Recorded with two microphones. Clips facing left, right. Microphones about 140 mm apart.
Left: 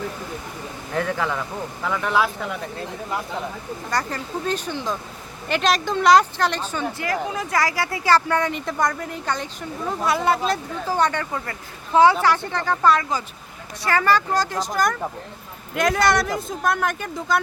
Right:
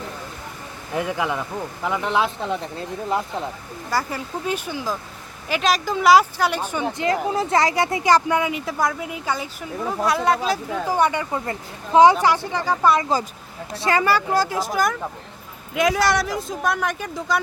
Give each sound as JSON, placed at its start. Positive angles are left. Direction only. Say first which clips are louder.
{"t": 0.9, "sound": "speech", "louder": "even", "side_deg": -15}
{"t": 3.8, "sound": "speech", "louder": "right 2 dB", "side_deg": -5}
{"t": 10.8, "sound": "speech", "louder": "right 1 dB", "side_deg": -10}
{"t": 14.0, "sound": "speech", "louder": "left 2 dB", "side_deg": -10}